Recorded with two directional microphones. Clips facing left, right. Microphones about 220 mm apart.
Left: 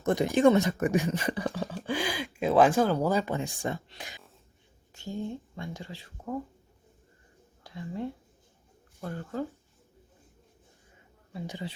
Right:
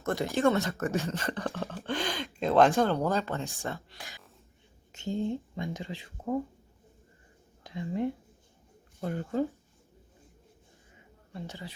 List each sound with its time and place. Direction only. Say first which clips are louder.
0.0 s speech: left 4 dB; 15° left (ahead or behind)
4.9 s speech: right 4 dB; 20° right (ahead or behind)
7.6 s speech: right 4 dB; 20° right (ahead or behind)